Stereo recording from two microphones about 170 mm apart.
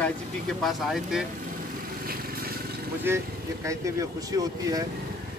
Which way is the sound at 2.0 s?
60° right (ahead or behind).